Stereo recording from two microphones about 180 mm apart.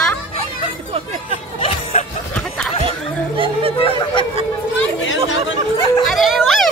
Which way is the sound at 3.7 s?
30° left (ahead or behind).